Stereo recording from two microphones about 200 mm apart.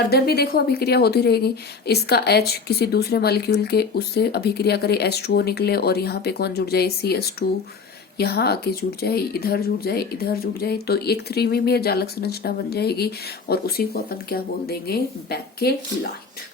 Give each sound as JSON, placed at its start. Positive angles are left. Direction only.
{"t": 0.1, "sound": "speech", "side_deg": 50}